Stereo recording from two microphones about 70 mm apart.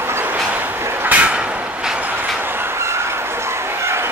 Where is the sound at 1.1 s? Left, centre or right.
Right.